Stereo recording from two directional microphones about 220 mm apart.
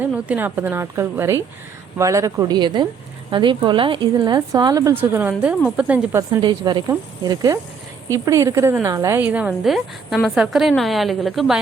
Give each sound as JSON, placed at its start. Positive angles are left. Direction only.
{"t": 0.1, "sound": "a woman's voice", "side_deg": -10}
{"t": 6.4, "sound": "a woman's voice", "side_deg": -20}